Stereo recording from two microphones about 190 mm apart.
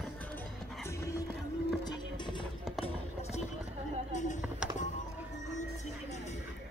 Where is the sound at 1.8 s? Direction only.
25° left (ahead or behind).